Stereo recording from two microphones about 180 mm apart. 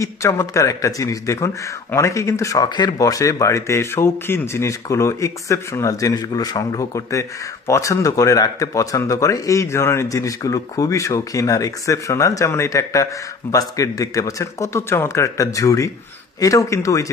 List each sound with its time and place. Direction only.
0.0 s a man's voice: 15° left (ahead or behind)